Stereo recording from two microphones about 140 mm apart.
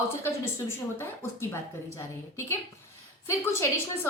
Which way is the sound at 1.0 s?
15° left (ahead or behind).